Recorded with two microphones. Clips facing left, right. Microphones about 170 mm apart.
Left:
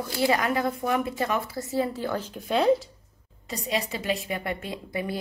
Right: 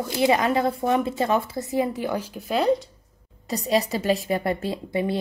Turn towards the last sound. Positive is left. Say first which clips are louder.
# right 6 dB
turn(degrees=-25)  # may be behind; listen again after turning